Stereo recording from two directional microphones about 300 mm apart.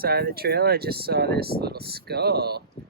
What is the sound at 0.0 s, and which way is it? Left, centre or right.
Speech, right.